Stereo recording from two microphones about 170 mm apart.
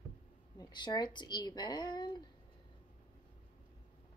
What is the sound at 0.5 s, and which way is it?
Speech, 25° left (ahead or behind).